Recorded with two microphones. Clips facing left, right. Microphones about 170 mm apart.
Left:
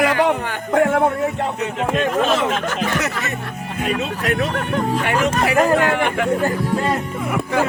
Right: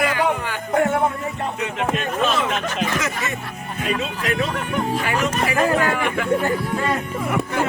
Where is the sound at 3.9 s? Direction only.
50° left (ahead or behind).